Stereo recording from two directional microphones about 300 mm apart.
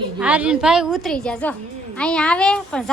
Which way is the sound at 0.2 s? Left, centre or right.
Centre.